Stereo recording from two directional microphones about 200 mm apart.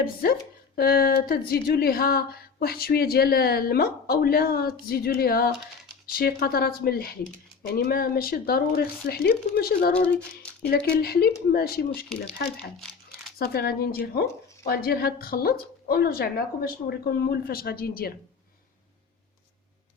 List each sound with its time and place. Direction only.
0.0 s speech: 45° left (ahead or behind)